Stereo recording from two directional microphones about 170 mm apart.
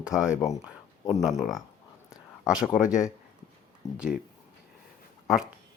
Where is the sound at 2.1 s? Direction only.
5° right (ahead or behind).